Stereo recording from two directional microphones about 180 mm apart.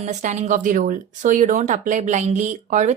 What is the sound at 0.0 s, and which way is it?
Speech, 40° right (ahead or behind).